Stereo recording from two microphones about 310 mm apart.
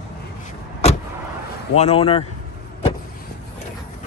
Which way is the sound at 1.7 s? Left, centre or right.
Centre.